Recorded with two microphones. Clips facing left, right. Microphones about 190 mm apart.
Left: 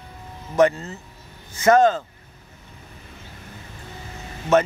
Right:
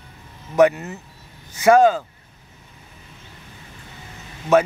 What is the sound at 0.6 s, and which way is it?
Speech, 15° right (ahead or behind).